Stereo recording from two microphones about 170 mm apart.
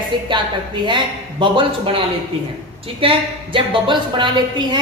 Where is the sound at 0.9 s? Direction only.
30° right (ahead or behind).